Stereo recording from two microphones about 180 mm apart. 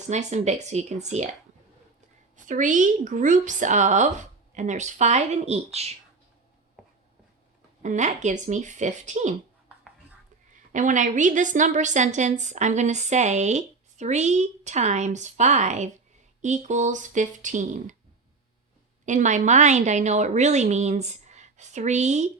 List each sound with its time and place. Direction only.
0.1 s a woman's voice: 40° right (ahead or behind)
6.8 s writing: centre (ahead or behind)
7.8 s a woman's voice: 40° right (ahead or behind)
10.7 s a woman's voice: 45° right (ahead or behind)
19.0 s a woman's voice: 45° right (ahead or behind)